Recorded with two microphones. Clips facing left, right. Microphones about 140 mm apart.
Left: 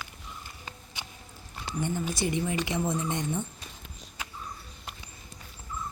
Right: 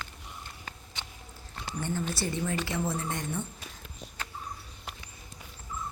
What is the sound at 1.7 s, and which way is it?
A woman's voice, 15° left (ahead or behind).